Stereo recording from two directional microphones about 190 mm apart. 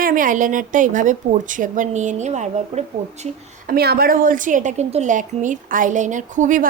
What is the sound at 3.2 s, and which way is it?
A woman's voice, 50° right (ahead or behind).